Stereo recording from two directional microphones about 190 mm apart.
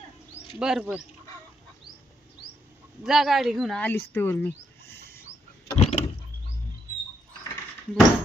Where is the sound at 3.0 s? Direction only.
Centre (ahead or behind).